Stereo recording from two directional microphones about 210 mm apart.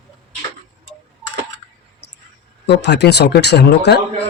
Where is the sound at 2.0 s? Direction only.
55° left (ahead or behind).